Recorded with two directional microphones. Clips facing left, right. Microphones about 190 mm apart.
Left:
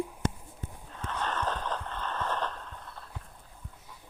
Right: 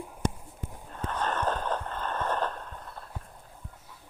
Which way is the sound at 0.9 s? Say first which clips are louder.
Right 3 dB; 45° right (ahead or behind).